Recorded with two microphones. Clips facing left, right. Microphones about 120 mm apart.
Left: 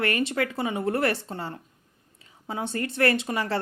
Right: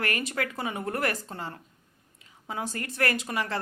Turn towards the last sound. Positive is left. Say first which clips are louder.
# left 4 dB
turn(degrees=30)  # may be behind; listen again after turning